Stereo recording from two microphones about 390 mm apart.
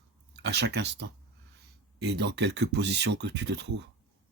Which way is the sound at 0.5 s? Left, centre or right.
Right.